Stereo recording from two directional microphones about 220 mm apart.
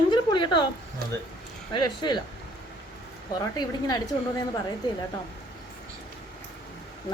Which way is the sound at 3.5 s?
20° left (ahead or behind).